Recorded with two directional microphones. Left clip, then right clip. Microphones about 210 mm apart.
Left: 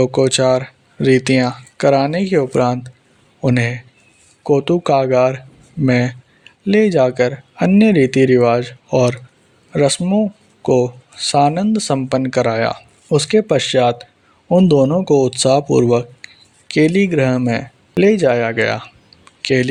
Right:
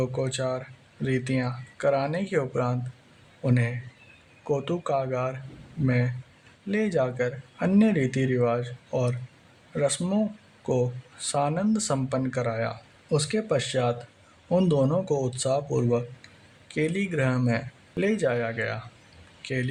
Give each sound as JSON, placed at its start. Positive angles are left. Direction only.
{"t": 0.0, "sound": "speech", "side_deg": 35}
{"t": 10.0, "sound": "speech", "side_deg": 20}
{"t": 10.7, "sound": "speech", "side_deg": 35}